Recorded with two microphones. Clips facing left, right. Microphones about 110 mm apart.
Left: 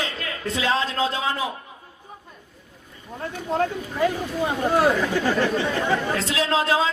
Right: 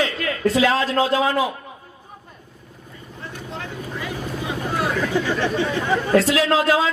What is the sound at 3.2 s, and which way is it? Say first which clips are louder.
Speech: left 9 dB; 45° left (ahead or behind).